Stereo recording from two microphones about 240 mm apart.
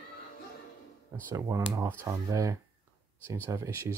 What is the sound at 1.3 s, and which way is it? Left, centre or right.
Speech, centre.